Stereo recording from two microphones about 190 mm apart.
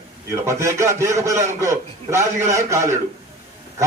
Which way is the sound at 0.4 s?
15° right (ahead or behind).